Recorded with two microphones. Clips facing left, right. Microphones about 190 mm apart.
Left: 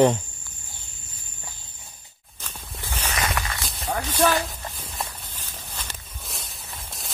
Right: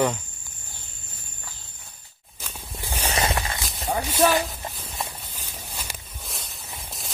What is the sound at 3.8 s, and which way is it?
Clip-clop, 10° right (ahead or behind).